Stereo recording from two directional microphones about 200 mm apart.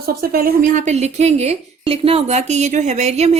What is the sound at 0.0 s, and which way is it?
A woman's voice, 50° right (ahead or behind).